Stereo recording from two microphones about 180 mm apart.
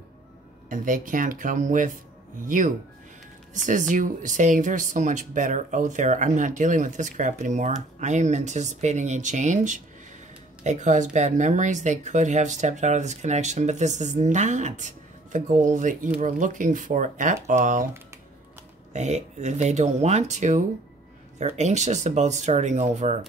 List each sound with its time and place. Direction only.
0.7 s speech: 45° right (ahead or behind)
18.9 s speech: 40° right (ahead or behind)